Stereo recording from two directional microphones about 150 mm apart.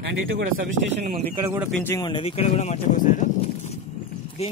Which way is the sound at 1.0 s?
55° right (ahead or behind).